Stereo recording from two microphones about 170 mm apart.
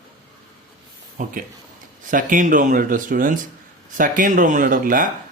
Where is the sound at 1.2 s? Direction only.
45° right (ahead or behind).